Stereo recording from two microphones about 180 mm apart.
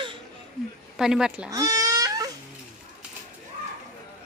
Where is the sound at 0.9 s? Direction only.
5° right (ahead or behind).